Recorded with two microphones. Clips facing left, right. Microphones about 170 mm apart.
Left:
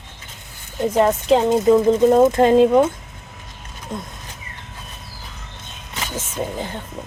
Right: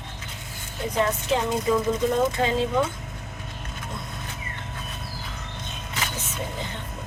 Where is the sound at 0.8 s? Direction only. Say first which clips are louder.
Left 8 dB; 55° left (ahead or behind).